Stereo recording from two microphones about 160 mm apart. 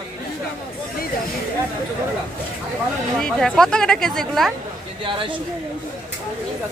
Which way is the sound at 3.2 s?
5° left (ahead or behind).